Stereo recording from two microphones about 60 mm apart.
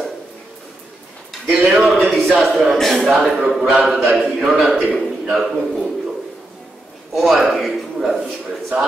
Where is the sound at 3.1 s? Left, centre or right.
Right.